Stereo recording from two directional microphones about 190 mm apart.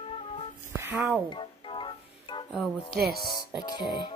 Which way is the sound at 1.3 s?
25° left (ahead or behind).